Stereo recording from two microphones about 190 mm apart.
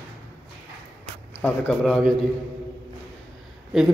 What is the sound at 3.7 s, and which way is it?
Speech, centre (ahead or behind).